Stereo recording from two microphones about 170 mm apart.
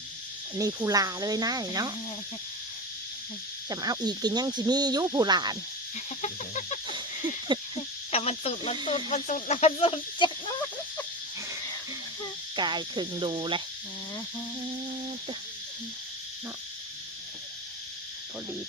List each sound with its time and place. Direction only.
0.9 s speech: 20° right (ahead or behind)
3.7 s speech: 25° right (ahead or behind)
6.2 s chicken: 45° left (ahead or behind)
7.5 s speech: 25° right (ahead or behind)
8.1 s speech: 35° left (ahead or behind)
12.5 s speech: 25° right (ahead or behind)